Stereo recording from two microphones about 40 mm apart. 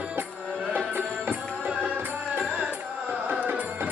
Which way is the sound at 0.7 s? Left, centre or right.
Right.